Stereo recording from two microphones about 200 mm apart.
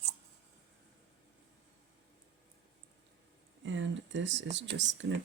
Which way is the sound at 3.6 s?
65° right (ahead or behind).